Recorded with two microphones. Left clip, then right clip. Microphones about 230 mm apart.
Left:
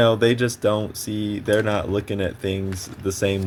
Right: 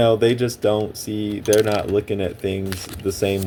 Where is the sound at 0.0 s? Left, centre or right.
Left.